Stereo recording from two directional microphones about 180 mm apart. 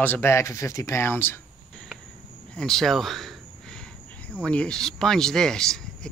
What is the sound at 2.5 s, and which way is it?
Speech, centre (ahead or behind).